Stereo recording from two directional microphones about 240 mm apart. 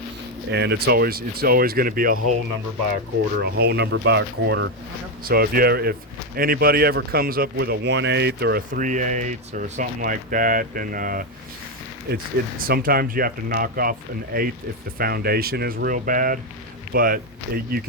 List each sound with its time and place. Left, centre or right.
0.5 s speech: right
3.4 s speech: right